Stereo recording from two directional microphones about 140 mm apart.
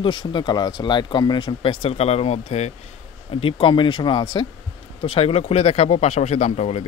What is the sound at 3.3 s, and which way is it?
Speech, 40° left (ahead or behind).